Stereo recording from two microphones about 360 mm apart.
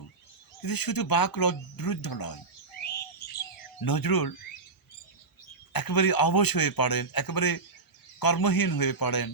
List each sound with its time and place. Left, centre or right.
0.6 s a man's voice: left
3.8 s a man's voice: left
5.7 s a man's voice: left